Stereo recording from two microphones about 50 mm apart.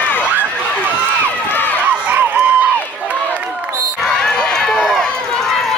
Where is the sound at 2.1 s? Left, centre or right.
Right.